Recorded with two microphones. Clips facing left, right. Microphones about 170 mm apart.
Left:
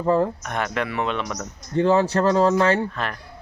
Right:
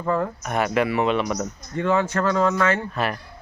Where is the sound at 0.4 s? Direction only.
5° right (ahead or behind).